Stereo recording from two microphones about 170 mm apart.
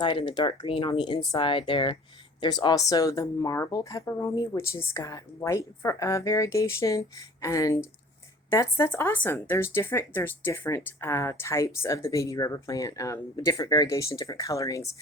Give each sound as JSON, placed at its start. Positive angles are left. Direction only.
{"t": 0.0, "sound": "speech", "side_deg": 30}